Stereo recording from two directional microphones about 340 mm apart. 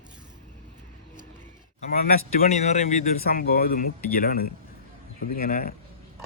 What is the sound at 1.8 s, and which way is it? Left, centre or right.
Speech, left.